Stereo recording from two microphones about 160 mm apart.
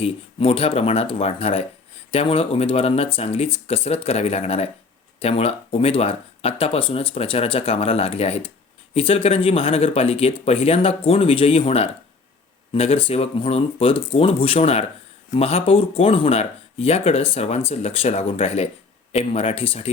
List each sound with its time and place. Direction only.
0.0 s speech: 35° left (ahead or behind)